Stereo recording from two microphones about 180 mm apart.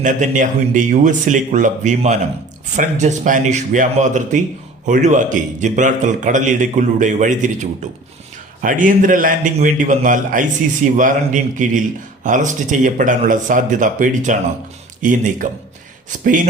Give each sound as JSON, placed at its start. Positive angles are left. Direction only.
{"t": 0.0, "sound": "a man's voice", "side_deg": -45}